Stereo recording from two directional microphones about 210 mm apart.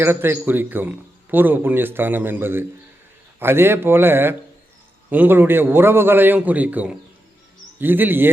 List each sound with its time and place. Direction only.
0.0 s a man's voice: 10° right (ahead or behind)